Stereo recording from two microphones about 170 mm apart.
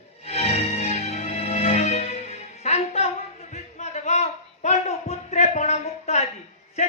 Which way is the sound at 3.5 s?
40° left (ahead or behind).